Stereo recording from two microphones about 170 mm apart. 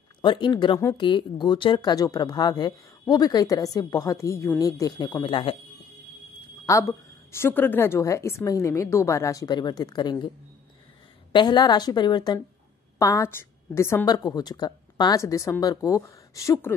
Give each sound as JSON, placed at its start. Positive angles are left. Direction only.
{"t": 0.2, "sound": "speech", "side_deg": 25}
{"t": 6.6, "sound": "a woman's voice", "side_deg": 20}
{"t": 11.3, "sound": "speech", "side_deg": 25}